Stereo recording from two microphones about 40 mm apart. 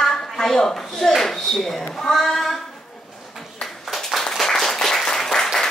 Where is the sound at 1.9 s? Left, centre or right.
Centre.